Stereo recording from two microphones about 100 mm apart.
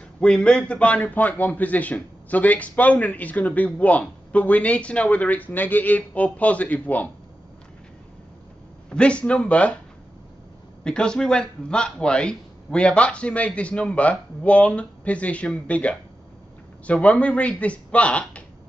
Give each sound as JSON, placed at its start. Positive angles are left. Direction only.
{"t": 0.2, "sound": "a man's voice", "side_deg": 10}
{"t": 8.9, "sound": "a man's voice", "side_deg": 10}
{"t": 10.8, "sound": "a man's voice", "side_deg": 10}